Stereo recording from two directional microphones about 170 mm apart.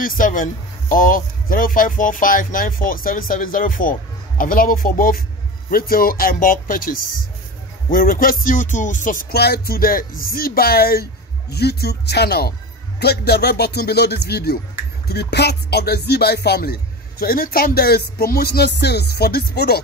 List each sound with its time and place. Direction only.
0.0 s speech: 50° left (ahead or behind)
4.4 s music: 55° left (ahead or behind)
11.5 s speech: 70° left (ahead or behind)